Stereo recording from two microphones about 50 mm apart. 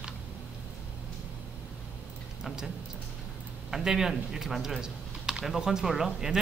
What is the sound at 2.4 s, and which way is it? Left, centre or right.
Tick-tock, centre.